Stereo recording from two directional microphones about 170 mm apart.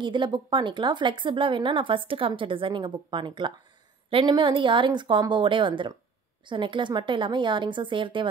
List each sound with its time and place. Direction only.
0.0 s speech: 25° right (ahead or behind)